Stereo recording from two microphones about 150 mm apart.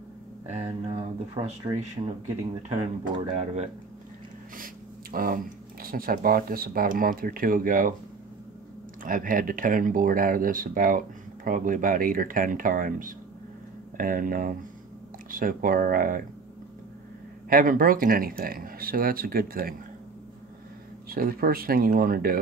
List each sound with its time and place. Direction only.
0.8 s speech: 35° right (ahead or behind); by 3.7 s 50° right (ahead or behind)
5.1 s speech: 70° right (ahead or behind)
9.0 s speech: 65° right (ahead or behind)
17.5 s speech: 70° right (ahead or behind)
21.1 s speech: 75° right (ahead or behind)